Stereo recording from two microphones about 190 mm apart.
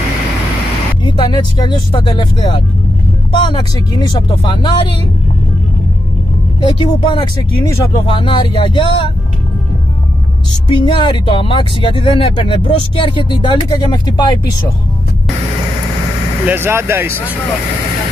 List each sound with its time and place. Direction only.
1.0 s speech: 25° left (ahead or behind)
6.6 s speech: 25° left (ahead or behind)
10.7 s speech: 25° left (ahead or behind)
16.4 s speech: 10° right (ahead or behind)